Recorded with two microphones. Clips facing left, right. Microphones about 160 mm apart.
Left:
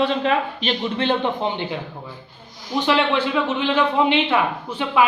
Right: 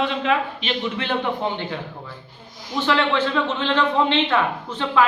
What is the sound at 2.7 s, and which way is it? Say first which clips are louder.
A man's voice: left 1 dB; 15° left (ahead or behind).